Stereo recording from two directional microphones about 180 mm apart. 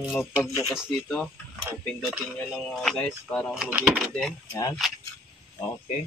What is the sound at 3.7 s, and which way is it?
Speech, 10° right (ahead or behind).